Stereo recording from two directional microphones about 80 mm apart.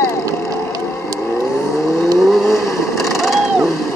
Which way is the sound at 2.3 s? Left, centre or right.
Centre.